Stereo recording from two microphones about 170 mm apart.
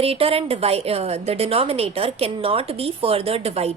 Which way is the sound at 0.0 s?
35° right (ahead or behind).